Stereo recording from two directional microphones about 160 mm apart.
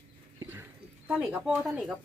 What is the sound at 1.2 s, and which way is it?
Speech, centre (ahead or behind).